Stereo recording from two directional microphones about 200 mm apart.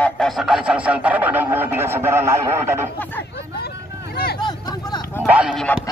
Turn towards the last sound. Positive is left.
turn(degrees=-5)  # may be behind; listen again after turning